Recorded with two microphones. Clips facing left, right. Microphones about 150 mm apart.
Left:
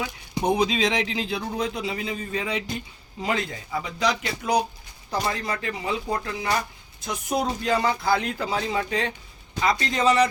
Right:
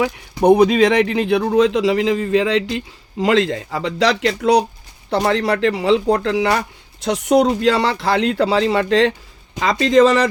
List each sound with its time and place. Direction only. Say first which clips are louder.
0.0 s a man's voice: right 11 dB; 65° right (ahead or behind); by 10.2 s 90° right